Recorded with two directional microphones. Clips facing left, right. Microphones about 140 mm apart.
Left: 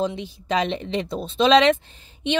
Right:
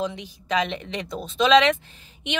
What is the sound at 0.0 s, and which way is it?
Speech, 30° left (ahead or behind).